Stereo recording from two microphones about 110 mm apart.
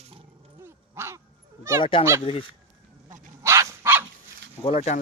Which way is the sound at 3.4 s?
25° right (ahead or behind).